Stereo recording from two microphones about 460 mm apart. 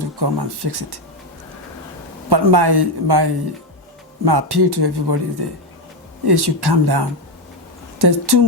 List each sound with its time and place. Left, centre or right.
0.0 s speech: right
2.3 s speech: right
4.3 s speech: right